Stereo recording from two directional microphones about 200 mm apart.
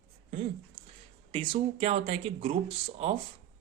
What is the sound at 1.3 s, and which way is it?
Speech, 25° right (ahead or behind).